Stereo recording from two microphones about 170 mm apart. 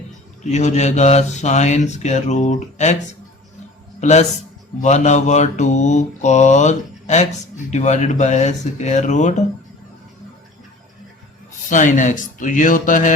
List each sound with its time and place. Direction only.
0.5 s mantra: 45° left (ahead or behind)
11.7 s mantra: 50° left (ahead or behind)